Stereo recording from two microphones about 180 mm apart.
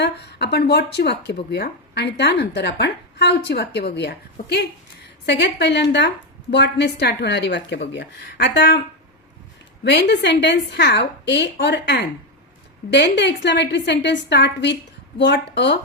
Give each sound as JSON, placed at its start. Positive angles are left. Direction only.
{"t": 0.0, "sound": "a woman's voice", "side_deg": 70}
{"t": 9.8, "sound": "a woman's voice", "side_deg": 70}